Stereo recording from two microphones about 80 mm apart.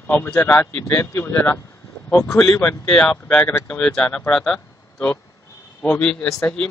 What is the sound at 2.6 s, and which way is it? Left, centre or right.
Speech, centre.